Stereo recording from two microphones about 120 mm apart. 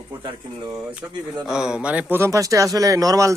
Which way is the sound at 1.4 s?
5° right (ahead or behind).